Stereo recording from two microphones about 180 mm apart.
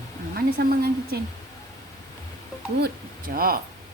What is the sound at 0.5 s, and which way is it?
Speech, 60° right (ahead or behind).